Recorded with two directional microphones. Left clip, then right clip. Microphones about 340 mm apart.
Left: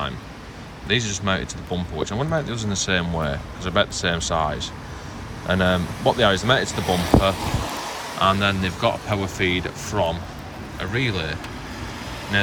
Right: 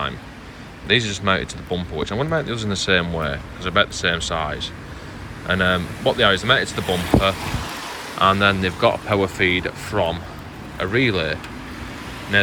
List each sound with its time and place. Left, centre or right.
0.9 s speech: centre
6.8 s speech: left
8.2 s speech: centre